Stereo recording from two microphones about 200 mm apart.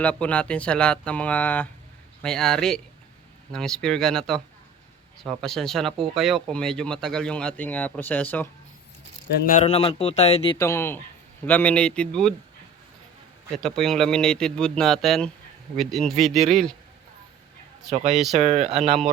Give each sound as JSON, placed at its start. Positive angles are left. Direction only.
{"t": 0.0, "sound": "speech", "side_deg": 5}
{"t": 9.5, "sound": "a man's voice", "side_deg": 35}
{"t": 10.6, "sound": "speech", "side_deg": 15}
{"t": 13.5, "sound": "speech", "side_deg": 0}
{"t": 17.9, "sound": "speech", "side_deg": -35}